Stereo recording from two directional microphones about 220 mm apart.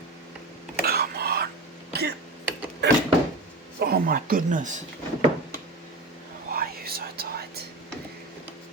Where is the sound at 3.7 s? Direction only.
45° right (ahead or behind).